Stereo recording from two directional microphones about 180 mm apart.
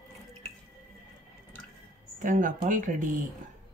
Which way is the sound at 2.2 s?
45° right (ahead or behind).